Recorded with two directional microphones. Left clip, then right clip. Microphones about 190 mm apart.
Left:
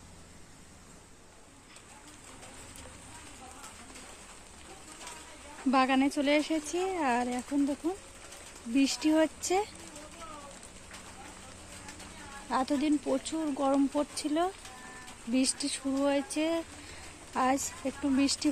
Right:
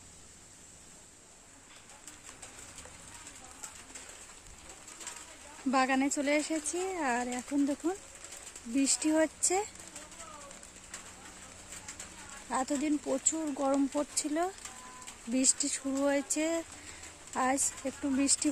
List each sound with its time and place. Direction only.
5.7 s speech: 10° right (ahead or behind)
8.7 s speech: 10° right (ahead or behind)
12.4 s speech: 10° right (ahead or behind)